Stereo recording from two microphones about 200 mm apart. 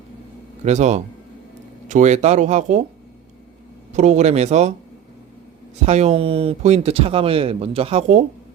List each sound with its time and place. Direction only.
0.6 s speech: 35° right (ahead or behind)
3.9 s speech: 35° right (ahead or behind)
5.8 s speech: 35° right (ahead or behind)